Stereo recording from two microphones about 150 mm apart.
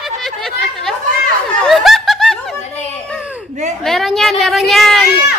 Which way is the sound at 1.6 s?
Centre (ahead or behind).